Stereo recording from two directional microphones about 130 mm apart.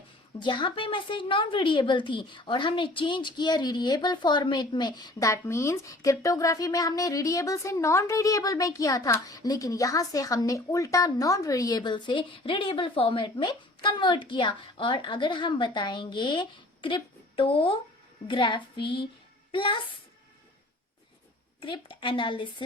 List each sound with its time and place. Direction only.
0.3 s a woman's voice: 35° left (ahead or behind)
21.6 s a woman's voice: 40° left (ahead or behind)